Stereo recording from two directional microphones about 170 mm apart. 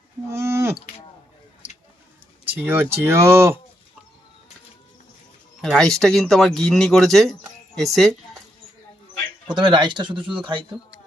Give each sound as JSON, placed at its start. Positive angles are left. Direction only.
{"t": 0.3, "sound": "livestock", "side_deg": -15}
{"t": 2.5, "sound": "speech", "side_deg": -10}
{"t": 5.6, "sound": "speech", "side_deg": 5}
{"t": 9.5, "sound": "speech", "side_deg": -25}